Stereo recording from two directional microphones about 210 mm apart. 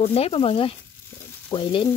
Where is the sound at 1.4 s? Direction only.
25° left (ahead or behind).